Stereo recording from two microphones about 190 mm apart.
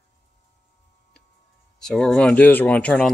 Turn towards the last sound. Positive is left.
turn(degrees=5)  # may be behind; listen again after turning